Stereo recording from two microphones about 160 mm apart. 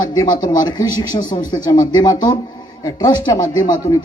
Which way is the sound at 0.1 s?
25° left (ahead or behind).